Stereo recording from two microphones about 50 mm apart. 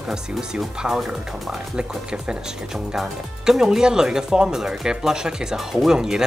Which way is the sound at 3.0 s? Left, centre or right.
Centre.